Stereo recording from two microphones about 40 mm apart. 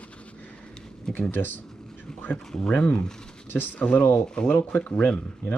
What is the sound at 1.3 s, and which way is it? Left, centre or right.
Speech, left.